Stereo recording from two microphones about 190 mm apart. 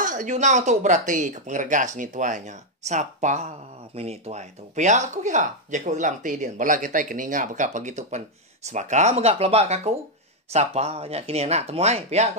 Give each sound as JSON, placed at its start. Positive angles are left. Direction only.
{"t": 0.0, "sound": "speech", "side_deg": -40}